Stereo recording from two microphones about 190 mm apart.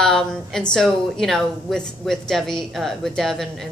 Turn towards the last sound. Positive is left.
turn(degrees=0)  # may be behind; listen again after turning